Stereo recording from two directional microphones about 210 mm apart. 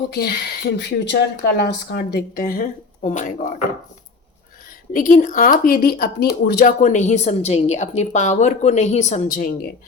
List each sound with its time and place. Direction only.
0.1 s speech: 50° left (ahead or behind)
4.9 s a woman's voice: 40° left (ahead or behind)